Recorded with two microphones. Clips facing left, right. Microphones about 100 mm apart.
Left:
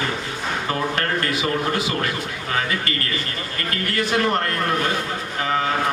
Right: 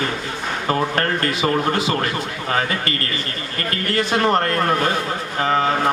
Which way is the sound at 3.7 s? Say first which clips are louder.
Right 2 dB; 30° right (ahead or behind).